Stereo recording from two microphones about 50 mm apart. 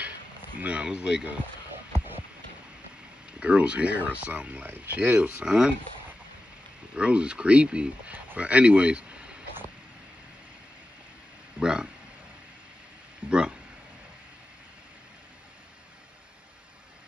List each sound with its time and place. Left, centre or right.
0.6 s speech: right
2.0 s a sound: right
3.3 s speech: right
5.4 s speech: centre
7.0 s speech: right
11.6 s speech: centre
13.3 s speech: centre